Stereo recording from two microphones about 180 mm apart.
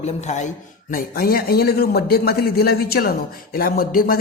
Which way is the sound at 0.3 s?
40° left (ahead or behind).